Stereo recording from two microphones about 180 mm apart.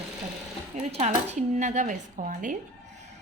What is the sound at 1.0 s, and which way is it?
Speech, 40° right (ahead or behind).